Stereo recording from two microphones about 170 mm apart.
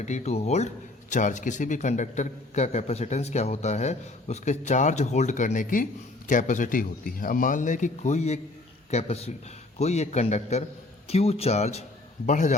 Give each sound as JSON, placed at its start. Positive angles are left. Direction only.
{"t": 0.0, "sound": "a man's voice", "side_deg": 40}